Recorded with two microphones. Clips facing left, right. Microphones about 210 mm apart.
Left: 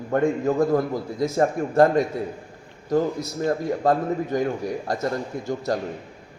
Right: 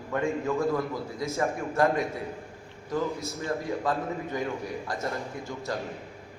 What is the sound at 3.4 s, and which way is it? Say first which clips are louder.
A man's voice: left 8 dB; 40° left (ahead or behind).